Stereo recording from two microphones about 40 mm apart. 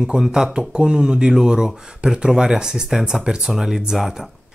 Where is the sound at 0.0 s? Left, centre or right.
Centre.